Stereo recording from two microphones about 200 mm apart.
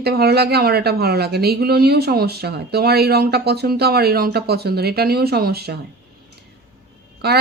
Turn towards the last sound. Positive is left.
turn(degrees=-50)  # may be behind; listen again after turning